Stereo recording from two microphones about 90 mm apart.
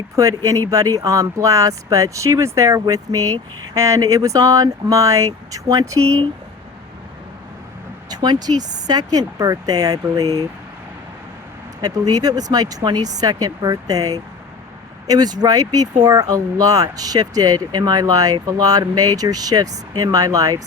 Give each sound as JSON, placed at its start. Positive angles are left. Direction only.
{"t": 0.2, "sound": "speech", "side_deg": -40}
{"t": 6.0, "sound": "speech", "side_deg": 10}
{"t": 8.1, "sound": "speech", "side_deg": -50}
{"t": 11.8, "sound": "speech", "side_deg": -45}